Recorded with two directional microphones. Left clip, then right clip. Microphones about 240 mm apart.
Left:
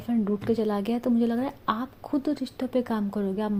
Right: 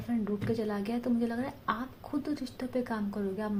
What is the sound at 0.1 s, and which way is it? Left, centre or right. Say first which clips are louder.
A woman's voice: left 6 dB; left.